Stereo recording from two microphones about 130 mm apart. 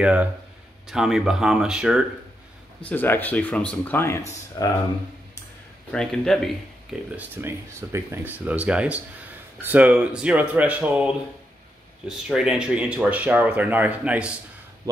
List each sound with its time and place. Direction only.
0.0 s speech: 10° right (ahead or behind)
2.8 s speech: 15° left (ahead or behind)
4.6 s speech: 30° left (ahead or behind)
5.9 s speech: 5° left (ahead or behind)
7.1 s speech: 15° right (ahead or behind)
12.1 s speech: 5° right (ahead or behind)